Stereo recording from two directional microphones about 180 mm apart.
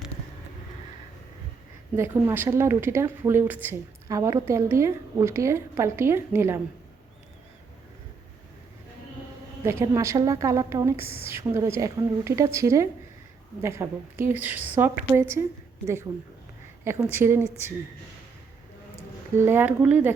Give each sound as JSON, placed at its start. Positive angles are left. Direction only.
{"t": 2.0, "sound": "speech", "side_deg": -10}
{"t": 9.6, "sound": "speech", "side_deg": -15}
{"t": 16.8, "sound": "speech", "side_deg": -15}
{"t": 19.4, "sound": "speech", "side_deg": -10}